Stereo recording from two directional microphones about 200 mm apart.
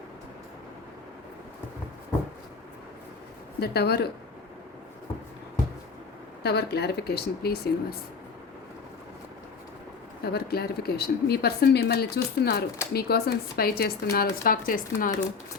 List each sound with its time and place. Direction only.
3.6 s speech: 55° left (ahead or behind)
6.4 s speech: 55° left (ahead or behind)
10.3 s speech: 50° left (ahead or behind)